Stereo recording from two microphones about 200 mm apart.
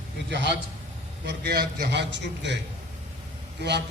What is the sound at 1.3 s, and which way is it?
A man's voice, 50° right (ahead or behind).